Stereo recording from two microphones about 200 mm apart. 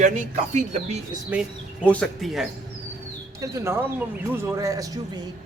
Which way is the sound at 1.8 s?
5° left (ahead or behind).